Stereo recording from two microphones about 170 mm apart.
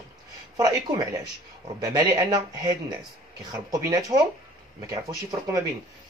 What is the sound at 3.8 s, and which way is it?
Speech, 20° right (ahead or behind).